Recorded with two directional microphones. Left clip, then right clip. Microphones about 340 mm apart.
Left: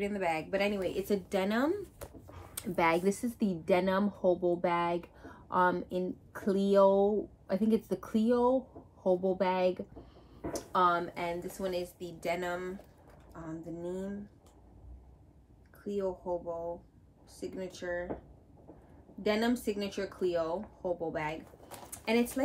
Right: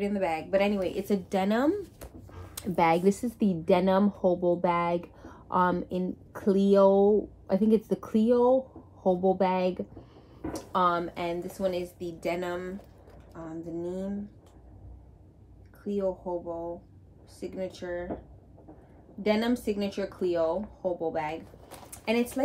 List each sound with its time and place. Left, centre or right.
0.0 s a woman's voice: centre
11.1 s a woman's voice: centre
15.9 s speech: centre
19.2 s speech: centre